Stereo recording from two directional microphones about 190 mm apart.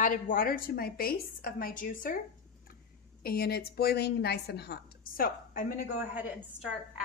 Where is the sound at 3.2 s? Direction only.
55° left (ahead or behind).